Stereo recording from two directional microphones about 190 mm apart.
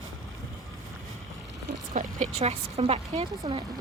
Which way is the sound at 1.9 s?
40° right (ahead or behind).